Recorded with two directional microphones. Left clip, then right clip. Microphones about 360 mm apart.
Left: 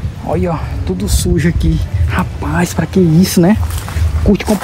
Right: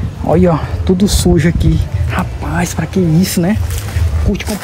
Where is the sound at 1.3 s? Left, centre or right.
Centre.